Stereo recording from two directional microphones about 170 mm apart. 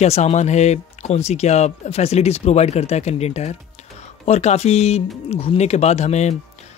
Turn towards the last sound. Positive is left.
turn(degrees=40)  # may be behind; listen again after turning